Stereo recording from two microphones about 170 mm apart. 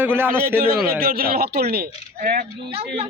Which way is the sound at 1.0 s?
60° right (ahead or behind).